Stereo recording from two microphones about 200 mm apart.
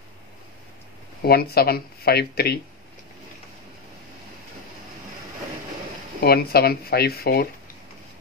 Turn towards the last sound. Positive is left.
turn(degrees=50)  # may be behind; listen again after turning